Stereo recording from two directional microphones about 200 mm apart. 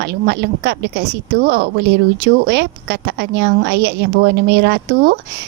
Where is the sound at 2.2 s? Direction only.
55° right (ahead or behind).